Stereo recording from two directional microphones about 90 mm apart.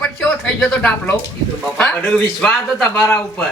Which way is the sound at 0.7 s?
10° left (ahead or behind).